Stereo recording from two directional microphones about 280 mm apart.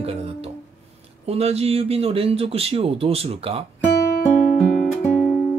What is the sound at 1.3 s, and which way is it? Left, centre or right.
A man's voice, right.